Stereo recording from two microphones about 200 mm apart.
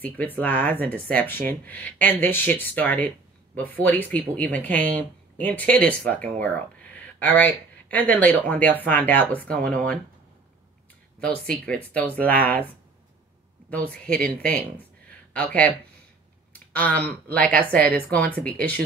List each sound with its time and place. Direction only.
0.2 s speech: 10° left (ahead or behind)
11.4 s speech: 5° left (ahead or behind)
14.0 s speech: 5° left (ahead or behind)
17.5 s speech: 50° right (ahead or behind)
17.8 s speech: 5° left (ahead or behind)